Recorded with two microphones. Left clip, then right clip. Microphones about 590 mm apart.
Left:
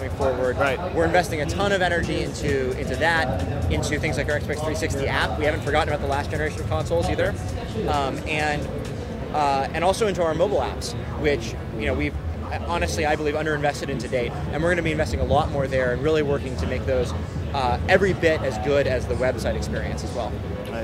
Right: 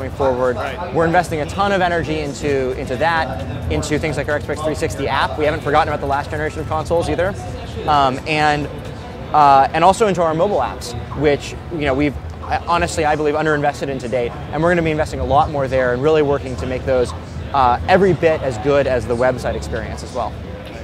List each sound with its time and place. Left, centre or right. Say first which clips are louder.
0.9 s speech: right 8 dB; right